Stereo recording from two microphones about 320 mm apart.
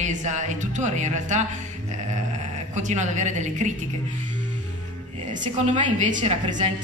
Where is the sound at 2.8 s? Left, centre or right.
Right.